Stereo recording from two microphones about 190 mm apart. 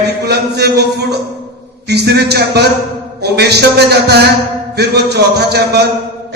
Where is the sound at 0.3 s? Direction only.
60° right (ahead or behind).